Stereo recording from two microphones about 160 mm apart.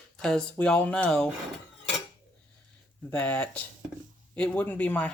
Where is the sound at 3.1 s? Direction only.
10° left (ahead or behind).